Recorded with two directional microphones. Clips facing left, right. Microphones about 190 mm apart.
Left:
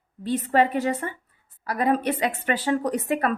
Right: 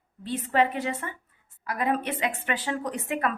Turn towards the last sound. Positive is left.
turn(degrees=40)  # may be behind; listen again after turning